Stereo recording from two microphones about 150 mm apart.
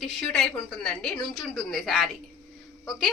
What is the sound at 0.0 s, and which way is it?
A woman's voice, 5° left (ahead or behind).